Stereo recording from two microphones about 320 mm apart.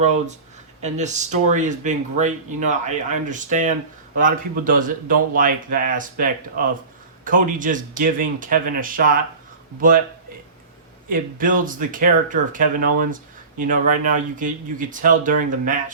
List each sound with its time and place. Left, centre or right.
0.8 s speech: right
11.1 s speech: right